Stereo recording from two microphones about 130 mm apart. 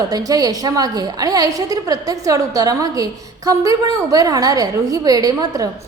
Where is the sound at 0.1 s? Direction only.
30° right (ahead or behind).